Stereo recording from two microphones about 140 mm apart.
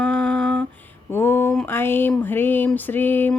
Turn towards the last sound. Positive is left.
turn(degrees=15)  # may be behind; listen again after turning